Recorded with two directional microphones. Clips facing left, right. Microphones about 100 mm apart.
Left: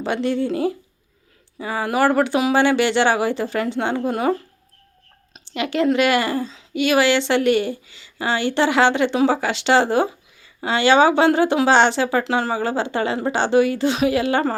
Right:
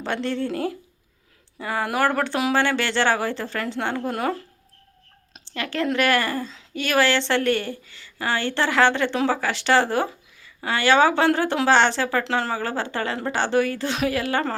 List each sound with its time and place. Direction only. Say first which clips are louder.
0.0 s speech: left 4 dB; 10° left (ahead or behind)
5.5 s speech: left 5 dB; 20° left (ahead or behind)